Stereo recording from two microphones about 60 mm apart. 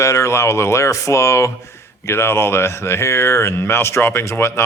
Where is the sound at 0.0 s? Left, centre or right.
Left.